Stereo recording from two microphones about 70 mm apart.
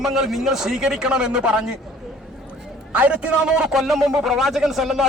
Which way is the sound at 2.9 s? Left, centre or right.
Centre.